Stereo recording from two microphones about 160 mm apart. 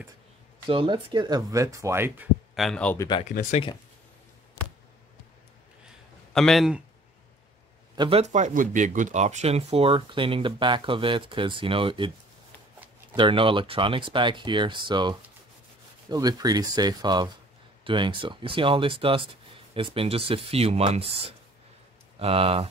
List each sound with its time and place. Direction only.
0.7 s speech: 30° right (ahead or behind); by 2.2 s 15° right (ahead or behind)
2.5 s a man's voice: centre (ahead or behind)
3.0 s speech: 30° left (ahead or behind)
3.3 s speech: 50° left (ahead or behind)
6.3 s a man's voice: centre (ahead or behind)
7.9 s a man's voice: 30° right (ahead or behind)
8.2 s speech: 50° right (ahead or behind); by 12.1 s 35° right (ahead or behind)
13.1 s speech: 30° right (ahead or behind)